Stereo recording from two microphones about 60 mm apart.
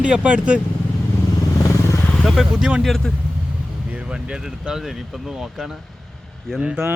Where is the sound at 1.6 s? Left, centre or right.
Left.